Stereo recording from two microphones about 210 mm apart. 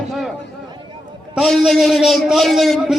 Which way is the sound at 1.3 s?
Centre (ahead or behind).